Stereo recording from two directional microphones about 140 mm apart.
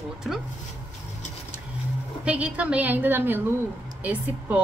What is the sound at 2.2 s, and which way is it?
A woman's voice, 10° right (ahead or behind).